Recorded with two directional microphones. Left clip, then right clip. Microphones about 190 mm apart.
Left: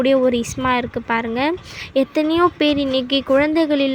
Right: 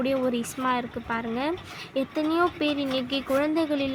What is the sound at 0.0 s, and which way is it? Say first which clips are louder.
Speech: left 10 dB; 25° left (ahead or behind).